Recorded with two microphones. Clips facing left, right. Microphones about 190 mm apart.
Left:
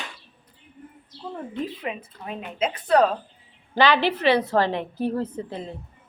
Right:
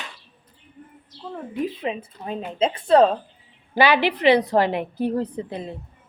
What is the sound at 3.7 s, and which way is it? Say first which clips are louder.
A woman's voice: right 1 dB; 10° right (ahead or behind).